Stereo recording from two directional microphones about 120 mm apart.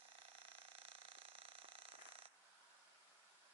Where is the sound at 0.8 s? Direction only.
50° right (ahead or behind).